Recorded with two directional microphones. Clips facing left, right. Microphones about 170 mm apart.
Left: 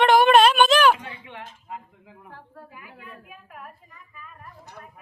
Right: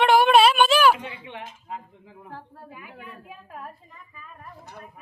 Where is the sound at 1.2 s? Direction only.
25° right (ahead or behind).